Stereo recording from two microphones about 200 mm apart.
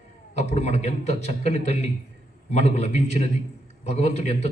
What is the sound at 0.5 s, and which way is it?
A man's voice, 35° left (ahead or behind).